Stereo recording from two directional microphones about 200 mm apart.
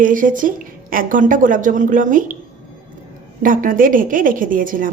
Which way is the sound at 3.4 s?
40° right (ahead or behind).